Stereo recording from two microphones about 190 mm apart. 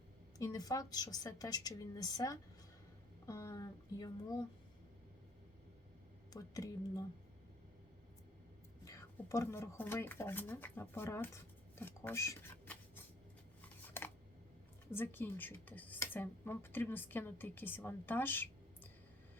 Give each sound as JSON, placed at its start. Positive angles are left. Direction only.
{"t": 0.3, "sound": "a woman's voice", "side_deg": 20}
{"t": 6.3, "sound": "a woman's voice", "side_deg": 20}
{"t": 8.8, "sound": "speech", "side_deg": 15}
{"t": 13.6, "sound": "a sound", "side_deg": 10}
{"t": 14.8, "sound": "speech", "side_deg": 10}